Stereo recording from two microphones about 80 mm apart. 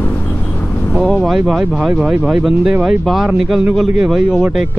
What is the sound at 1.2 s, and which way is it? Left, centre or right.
Speech, centre.